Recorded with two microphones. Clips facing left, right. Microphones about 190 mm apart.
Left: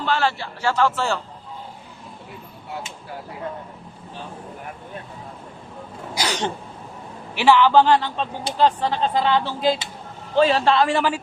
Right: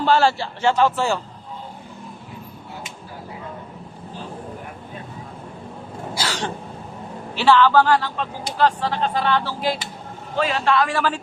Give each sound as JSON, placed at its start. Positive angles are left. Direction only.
{"t": 0.0, "sound": "a man's voice", "side_deg": -35}
{"t": 0.8, "sound": "a man's voice", "side_deg": -15}
{"t": 6.1, "sound": "speech", "side_deg": 20}